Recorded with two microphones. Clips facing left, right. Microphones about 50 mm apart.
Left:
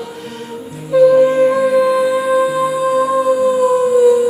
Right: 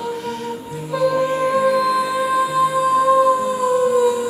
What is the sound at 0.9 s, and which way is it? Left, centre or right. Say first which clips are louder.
Music: left 9 dB; centre.